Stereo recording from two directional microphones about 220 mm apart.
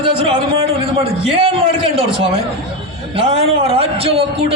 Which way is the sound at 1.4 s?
25° right (ahead or behind).